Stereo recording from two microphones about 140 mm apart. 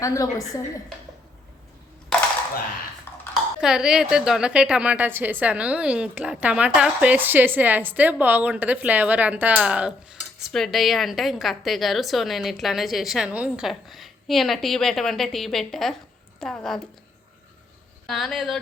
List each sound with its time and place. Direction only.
0.0 s a woman's voice: 25° left (ahead or behind)
3.1 s a sound: 15° left (ahead or behind)
3.6 s a woman's voice: 5° right (ahead or behind)
18.0 s a woman's voice: centre (ahead or behind)